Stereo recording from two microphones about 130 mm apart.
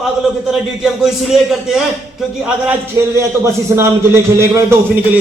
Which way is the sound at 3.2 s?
20° right (ahead or behind).